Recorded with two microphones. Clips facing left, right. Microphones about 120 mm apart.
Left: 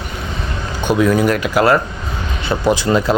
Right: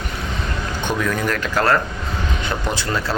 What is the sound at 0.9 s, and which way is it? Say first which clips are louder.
Speech: left 9 dB; 15° left (ahead or behind).